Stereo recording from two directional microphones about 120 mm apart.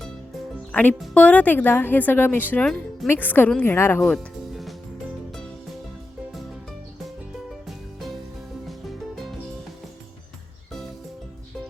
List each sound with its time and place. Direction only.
0.7 s speech: 15° left (ahead or behind)
4.0 s music: 5° left (ahead or behind)
9.1 s music: centre (ahead or behind)